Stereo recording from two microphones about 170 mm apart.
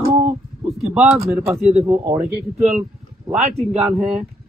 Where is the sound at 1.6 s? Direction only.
35° right (ahead or behind).